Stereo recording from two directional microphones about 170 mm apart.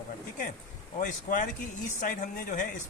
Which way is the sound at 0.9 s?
50° left (ahead or behind).